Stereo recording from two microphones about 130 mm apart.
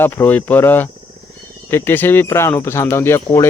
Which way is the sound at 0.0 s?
15° left (ahead or behind).